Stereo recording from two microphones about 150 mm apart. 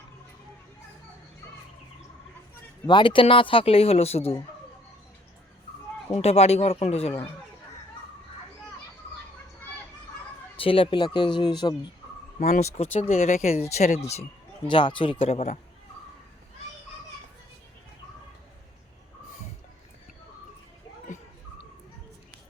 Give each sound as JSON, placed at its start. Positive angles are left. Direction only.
{"t": 2.8, "sound": "a man's voice", "side_deg": 30}
{"t": 6.1, "sound": "speech", "side_deg": 45}
{"t": 10.6, "sound": "a man's voice", "side_deg": 35}
{"t": 12.4, "sound": "speech", "side_deg": 50}
{"t": 14.7, "sound": "a man's voice", "side_deg": 35}